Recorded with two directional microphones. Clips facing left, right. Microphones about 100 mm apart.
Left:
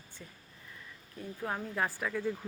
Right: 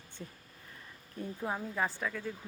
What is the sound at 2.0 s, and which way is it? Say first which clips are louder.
Speech: left 4 dB; 10° left (ahead or behind).